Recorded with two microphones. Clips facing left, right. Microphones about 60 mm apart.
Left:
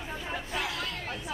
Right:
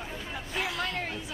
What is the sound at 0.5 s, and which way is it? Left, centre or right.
Hubbub, centre.